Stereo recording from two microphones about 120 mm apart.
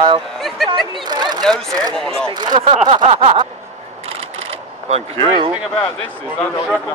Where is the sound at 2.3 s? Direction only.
40° right (ahead or behind).